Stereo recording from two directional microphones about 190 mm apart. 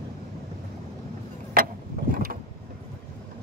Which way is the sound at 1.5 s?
50° right (ahead or behind).